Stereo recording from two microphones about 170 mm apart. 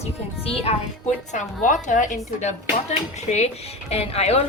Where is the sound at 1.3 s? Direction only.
45° left (ahead or behind).